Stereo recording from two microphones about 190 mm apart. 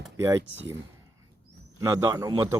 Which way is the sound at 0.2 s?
15° right (ahead or behind).